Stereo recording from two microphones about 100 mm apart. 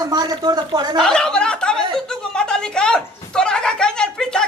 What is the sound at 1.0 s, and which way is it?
A woman's voice, 5° left (ahead or behind).